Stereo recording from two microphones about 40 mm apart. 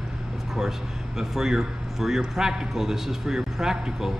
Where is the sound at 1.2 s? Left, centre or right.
Centre.